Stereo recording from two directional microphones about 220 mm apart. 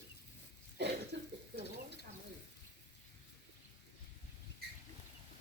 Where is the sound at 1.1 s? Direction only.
50° right (ahead or behind).